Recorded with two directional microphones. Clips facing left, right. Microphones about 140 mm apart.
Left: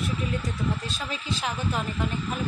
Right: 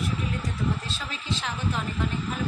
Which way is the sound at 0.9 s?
10° left (ahead or behind).